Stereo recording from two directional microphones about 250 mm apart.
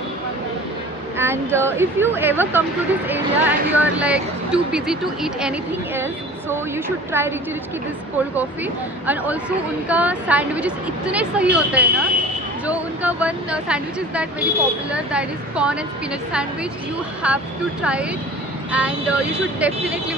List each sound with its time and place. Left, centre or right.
1.1 s speech: centre
7.1 s speech: centre
9.0 s speech: centre
17.2 s speech: centre
18.7 s speech: centre